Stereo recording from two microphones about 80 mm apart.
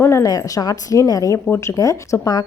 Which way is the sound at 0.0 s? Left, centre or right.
Left.